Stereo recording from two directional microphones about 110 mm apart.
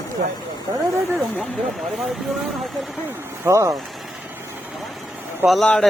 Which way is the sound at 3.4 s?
30° right (ahead or behind).